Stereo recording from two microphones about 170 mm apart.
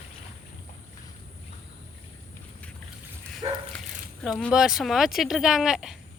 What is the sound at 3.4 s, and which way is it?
Bow-wow, 30° right (ahead or behind).